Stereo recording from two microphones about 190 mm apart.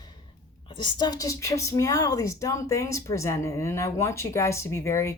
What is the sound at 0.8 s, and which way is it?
Speech, 20° left (ahead or behind).